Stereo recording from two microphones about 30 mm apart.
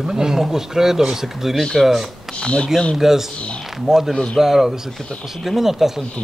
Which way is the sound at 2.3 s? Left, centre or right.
Left.